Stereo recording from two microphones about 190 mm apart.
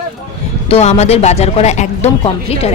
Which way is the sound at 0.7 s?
35° left (ahead or behind).